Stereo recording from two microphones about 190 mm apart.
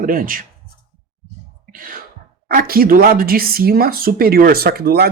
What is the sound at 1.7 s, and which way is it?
Speech, 45° right (ahead or behind).